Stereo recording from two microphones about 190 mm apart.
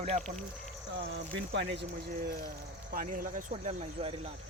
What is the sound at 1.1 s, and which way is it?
Speech, 65° right (ahead or behind).